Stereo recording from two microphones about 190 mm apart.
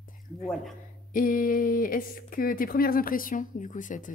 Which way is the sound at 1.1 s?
45° left (ahead or behind).